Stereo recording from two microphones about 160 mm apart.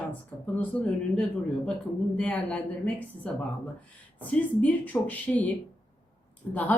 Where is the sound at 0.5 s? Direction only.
10° left (ahead or behind).